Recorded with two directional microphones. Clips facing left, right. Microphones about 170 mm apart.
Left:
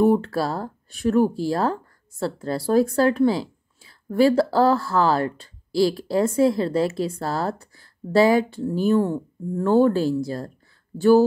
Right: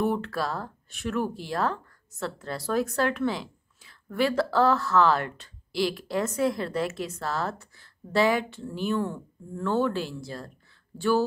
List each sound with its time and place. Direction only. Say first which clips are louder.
0.0 s speech: left 8 dB; 35° left (ahead or behind)